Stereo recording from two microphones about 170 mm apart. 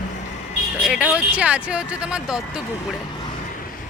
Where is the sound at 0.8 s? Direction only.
5° right (ahead or behind).